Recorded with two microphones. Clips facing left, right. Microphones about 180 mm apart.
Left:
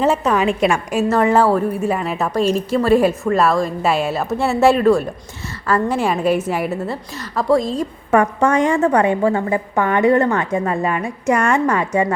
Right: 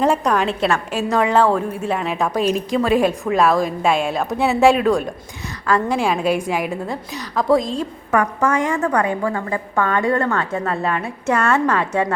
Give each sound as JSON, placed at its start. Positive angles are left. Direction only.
{"t": 0.0, "sound": "a woman's voice", "side_deg": 5}
{"t": 8.1, "sound": "a woman's voice", "side_deg": 30}